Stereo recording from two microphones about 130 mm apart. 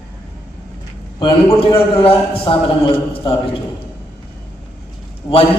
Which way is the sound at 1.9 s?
45° left (ahead or behind).